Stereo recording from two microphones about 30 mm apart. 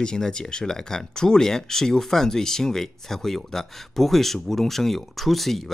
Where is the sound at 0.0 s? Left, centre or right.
Left.